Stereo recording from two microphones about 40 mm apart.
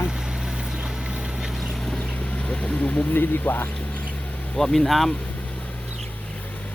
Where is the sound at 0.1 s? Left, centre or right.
Centre.